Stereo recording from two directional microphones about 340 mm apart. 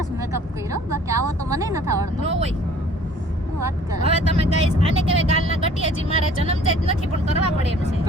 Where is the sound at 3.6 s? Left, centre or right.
Centre.